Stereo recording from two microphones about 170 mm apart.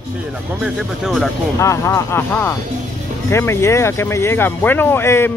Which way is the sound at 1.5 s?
15° left (ahead or behind).